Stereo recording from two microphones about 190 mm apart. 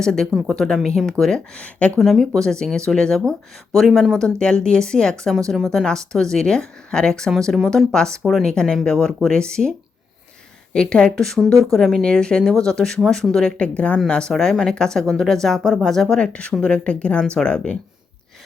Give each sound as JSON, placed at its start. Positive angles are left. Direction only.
{"t": 0.0, "sound": "speech", "side_deg": 5}